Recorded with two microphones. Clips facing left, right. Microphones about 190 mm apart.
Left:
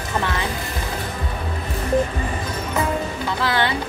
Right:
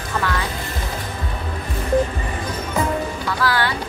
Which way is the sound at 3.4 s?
20° left (ahead or behind).